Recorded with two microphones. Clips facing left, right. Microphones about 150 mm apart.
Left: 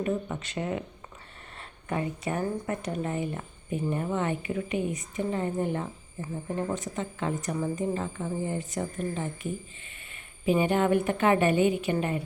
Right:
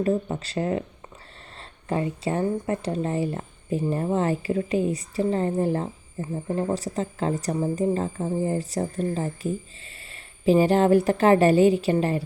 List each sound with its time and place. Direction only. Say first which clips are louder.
0.0 s speech: right 6 dB; 30° right (ahead or behind)